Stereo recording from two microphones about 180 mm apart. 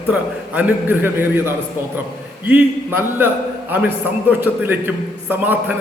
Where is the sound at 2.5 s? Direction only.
10° right (ahead or behind).